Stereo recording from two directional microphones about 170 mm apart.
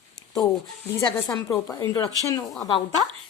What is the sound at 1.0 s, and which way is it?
A woman's voice, 20° left (ahead or behind).